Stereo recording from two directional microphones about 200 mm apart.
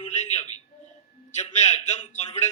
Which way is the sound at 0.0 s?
35° left (ahead or behind).